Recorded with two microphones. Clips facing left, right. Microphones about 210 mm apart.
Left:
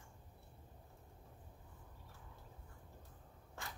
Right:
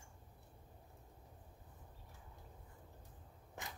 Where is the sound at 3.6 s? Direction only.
20° right (ahead or behind).